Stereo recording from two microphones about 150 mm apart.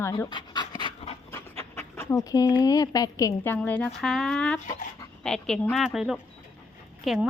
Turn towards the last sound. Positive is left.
turn(degrees=-5)  # may be behind; listen again after turning